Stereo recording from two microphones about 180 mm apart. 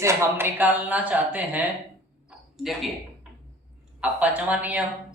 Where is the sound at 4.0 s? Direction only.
5° right (ahead or behind).